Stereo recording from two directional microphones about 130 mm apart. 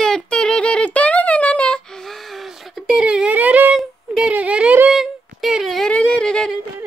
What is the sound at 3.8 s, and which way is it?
Humming, 5° right (ahead or behind).